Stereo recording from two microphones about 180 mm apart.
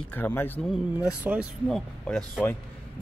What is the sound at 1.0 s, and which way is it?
Speech, 5° right (ahead or behind).